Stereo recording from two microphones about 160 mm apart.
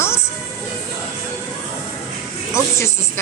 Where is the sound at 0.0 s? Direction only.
15° left (ahead or behind).